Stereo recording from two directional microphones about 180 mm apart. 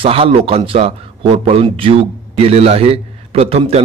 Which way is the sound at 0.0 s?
30° right (ahead or behind).